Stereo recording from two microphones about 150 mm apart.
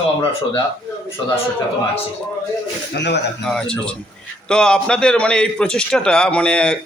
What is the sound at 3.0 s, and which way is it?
Speech, 90° left.